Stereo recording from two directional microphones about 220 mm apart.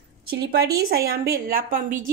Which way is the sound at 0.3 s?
45° right (ahead or behind).